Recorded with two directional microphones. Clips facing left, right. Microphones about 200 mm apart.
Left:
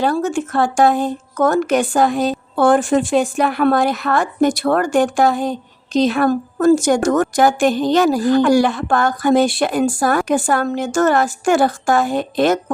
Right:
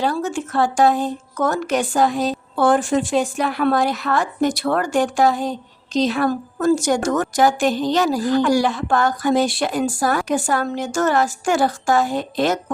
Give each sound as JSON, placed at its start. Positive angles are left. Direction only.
{"t": 0.0, "sound": "a woman's voice", "side_deg": 50}